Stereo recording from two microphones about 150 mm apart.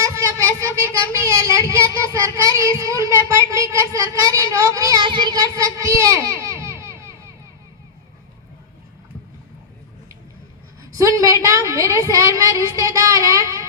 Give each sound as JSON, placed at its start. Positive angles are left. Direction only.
{"t": 0.0, "sound": "speech", "side_deg": -20}
{"t": 10.9, "sound": "a woman's voice", "side_deg": -20}